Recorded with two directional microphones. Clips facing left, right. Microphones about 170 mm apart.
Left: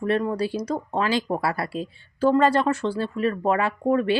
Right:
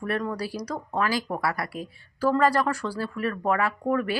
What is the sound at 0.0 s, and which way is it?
Speech, 25° left (ahead or behind).